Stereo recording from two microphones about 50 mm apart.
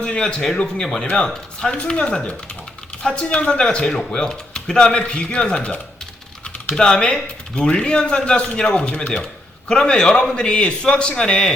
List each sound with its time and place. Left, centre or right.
0.0 s a man's voice: centre